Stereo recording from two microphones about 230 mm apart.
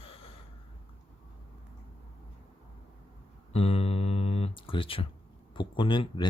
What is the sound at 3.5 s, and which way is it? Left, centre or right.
Speech, left.